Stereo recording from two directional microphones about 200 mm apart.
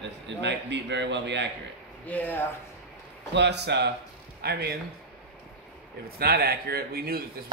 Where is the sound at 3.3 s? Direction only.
60° right (ahead or behind).